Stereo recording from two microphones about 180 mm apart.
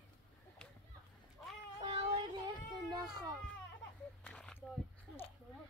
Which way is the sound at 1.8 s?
30° right (ahead or behind).